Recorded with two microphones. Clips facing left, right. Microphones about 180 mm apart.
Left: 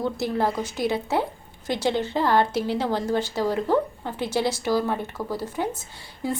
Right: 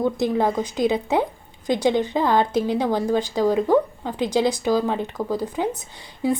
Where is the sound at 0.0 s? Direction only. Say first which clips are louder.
Right 4 dB; 15° right (ahead or behind).